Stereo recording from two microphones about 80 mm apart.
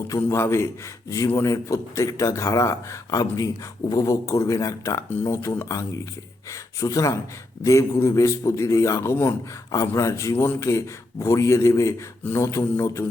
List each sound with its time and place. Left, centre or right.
0.1 s speech: left
5.0 s speech: left
5.3 s speech: left